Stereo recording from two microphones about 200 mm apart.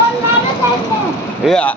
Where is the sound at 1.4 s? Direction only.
5° left (ahead or behind).